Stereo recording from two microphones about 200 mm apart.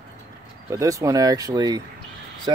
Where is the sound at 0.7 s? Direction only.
15° right (ahead or behind).